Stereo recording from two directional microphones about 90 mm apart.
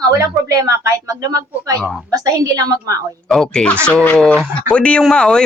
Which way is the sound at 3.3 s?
Centre (ahead or behind).